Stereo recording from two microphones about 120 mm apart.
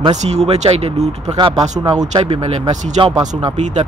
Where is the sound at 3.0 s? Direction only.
45° right (ahead or behind).